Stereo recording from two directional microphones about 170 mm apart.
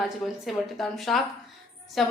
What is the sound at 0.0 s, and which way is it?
A woman's voice, centre (ahead or behind).